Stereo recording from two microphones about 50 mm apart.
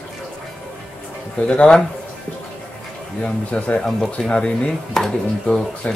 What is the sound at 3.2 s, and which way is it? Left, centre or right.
Speech, left.